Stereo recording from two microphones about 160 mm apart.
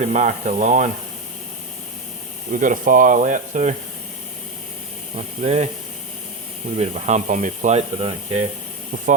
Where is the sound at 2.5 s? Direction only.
55° right (ahead or behind).